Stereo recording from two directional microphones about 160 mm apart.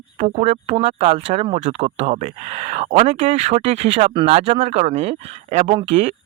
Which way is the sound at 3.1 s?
35° right (ahead or behind).